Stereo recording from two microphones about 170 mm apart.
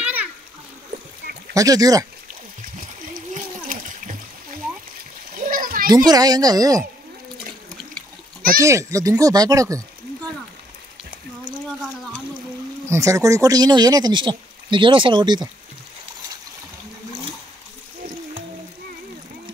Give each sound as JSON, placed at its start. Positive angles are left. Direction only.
{"t": 0.0, "sound": "splash", "side_deg": -10}
{"t": 1.5, "sound": "speech", "side_deg": -20}
{"t": 3.7, "sound": "splash", "side_deg": -55}
{"t": 5.3, "sound": "splash", "side_deg": -55}
{"t": 6.0, "sound": "speech", "side_deg": -25}
{"t": 8.5, "sound": "a child's voice", "side_deg": -15}
{"t": 12.8, "sound": "speech", "side_deg": -15}